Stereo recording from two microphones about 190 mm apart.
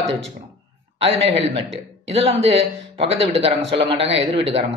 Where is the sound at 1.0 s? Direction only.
25° right (ahead or behind).